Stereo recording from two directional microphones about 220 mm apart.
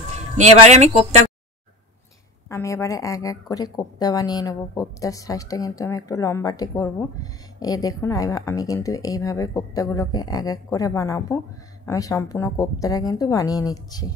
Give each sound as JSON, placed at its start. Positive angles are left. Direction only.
{"t": 0.1, "sound": "a man's voice", "side_deg": -30}
{"t": 2.5, "sound": "speech", "side_deg": 15}